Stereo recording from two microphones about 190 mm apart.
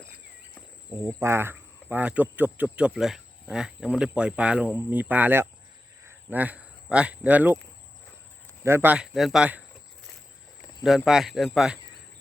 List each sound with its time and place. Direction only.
1.0 s speech: 15° right (ahead or behind)
8.6 s speech: 10° right (ahead or behind)
10.8 s speech: centre (ahead or behind)